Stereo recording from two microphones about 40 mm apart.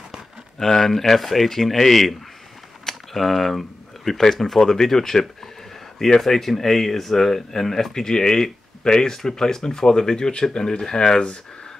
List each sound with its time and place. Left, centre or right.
0.6 s speech: centre